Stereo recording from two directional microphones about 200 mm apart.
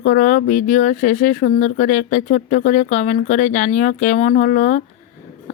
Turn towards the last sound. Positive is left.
turn(degrees=40)  # may be behind; listen again after turning